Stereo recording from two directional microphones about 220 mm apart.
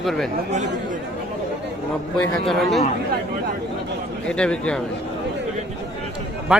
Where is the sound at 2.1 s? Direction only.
Centre (ahead or behind).